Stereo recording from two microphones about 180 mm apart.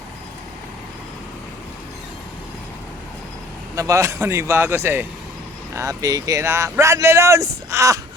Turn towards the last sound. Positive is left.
turn(degrees=-15)  # may be behind; listen again after turning